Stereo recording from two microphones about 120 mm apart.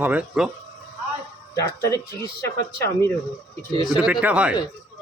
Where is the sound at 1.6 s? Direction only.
25° left (ahead or behind).